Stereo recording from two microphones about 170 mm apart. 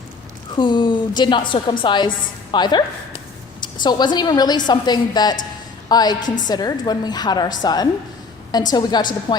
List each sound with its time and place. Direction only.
0.5 s a woman's voice: 25° left (ahead or behind)